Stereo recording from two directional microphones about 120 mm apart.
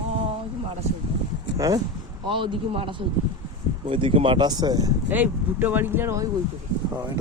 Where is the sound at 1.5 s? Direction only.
30° right (ahead or behind).